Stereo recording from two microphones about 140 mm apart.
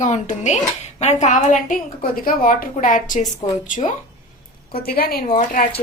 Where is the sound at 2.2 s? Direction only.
90° left; by 3.9 s 65° left (ahead or behind).